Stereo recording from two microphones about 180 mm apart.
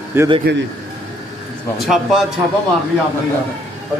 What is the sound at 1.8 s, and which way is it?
Speech, centre (ahead or behind).